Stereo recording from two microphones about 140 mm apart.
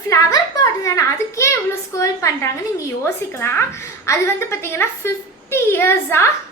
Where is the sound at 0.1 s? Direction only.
25° left (ahead or behind).